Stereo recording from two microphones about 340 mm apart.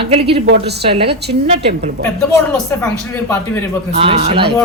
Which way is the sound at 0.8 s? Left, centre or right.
Centre.